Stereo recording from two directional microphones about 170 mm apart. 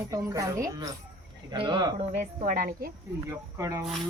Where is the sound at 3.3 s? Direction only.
20° right (ahead or behind).